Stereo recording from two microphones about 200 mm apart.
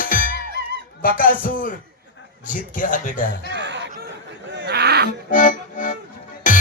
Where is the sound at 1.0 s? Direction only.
45° left (ahead or behind).